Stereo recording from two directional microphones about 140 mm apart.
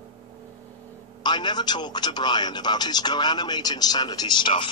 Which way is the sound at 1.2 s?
30° left (ahead or behind).